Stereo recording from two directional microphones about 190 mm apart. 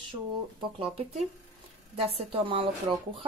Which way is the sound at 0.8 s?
30° right (ahead or behind).